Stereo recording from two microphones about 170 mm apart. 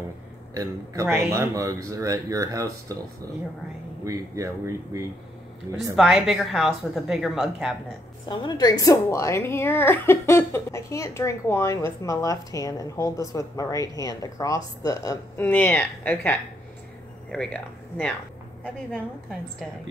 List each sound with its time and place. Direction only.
1.0 s speech: 10° right (ahead or behind)
4.0 s speech: 20° right (ahead or behind)
5.9 s a woman's voice: centre (ahead or behind)
8.3 s a woman's voice: 25° left (ahead or behind); by 18.1 s 5° left (ahead or behind)